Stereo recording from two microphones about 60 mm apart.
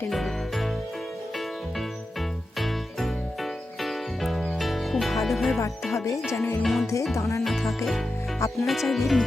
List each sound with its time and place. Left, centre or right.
0.1 s music: centre
2.6 s music: centre
5.8 s speech: centre
7.2 s speech: left
7.4 s speech: centre